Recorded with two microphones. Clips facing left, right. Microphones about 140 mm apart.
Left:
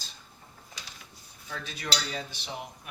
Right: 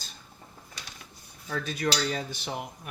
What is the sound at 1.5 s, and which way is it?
Speech, 45° right (ahead or behind).